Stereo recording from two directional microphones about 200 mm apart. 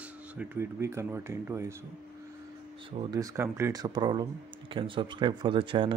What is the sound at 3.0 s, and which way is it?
Speech, 15° right (ahead or behind).